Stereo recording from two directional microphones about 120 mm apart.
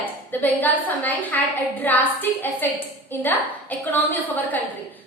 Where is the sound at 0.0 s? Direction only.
15° left (ahead or behind).